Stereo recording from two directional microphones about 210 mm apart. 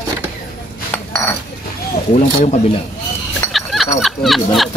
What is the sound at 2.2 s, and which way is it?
Speech, 30° left (ahead or behind).